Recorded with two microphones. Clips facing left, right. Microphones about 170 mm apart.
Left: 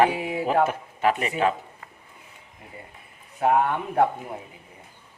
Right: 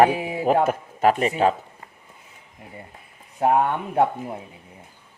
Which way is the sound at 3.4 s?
25° right (ahead or behind).